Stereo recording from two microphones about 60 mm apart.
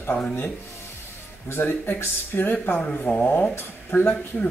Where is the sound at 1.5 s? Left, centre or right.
Left.